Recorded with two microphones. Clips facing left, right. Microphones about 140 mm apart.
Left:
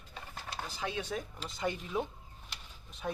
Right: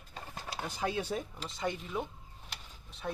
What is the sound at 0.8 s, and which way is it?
Speech, 40° right (ahead or behind).